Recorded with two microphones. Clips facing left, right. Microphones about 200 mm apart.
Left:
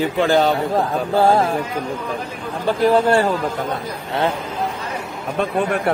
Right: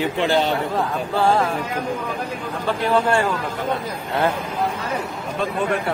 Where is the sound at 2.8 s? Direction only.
35° left (ahead or behind).